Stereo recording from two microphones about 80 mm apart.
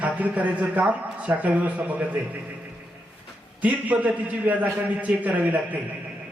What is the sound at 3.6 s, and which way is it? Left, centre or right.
A man's voice, centre.